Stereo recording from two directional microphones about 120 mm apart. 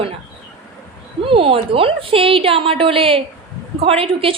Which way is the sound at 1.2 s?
50° right (ahead or behind).